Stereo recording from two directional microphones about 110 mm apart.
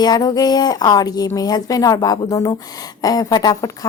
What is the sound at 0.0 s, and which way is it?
A woman's voice, 40° left (ahead or behind).